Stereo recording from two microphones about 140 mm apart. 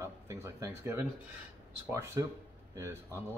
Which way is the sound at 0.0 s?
20° right (ahead or behind).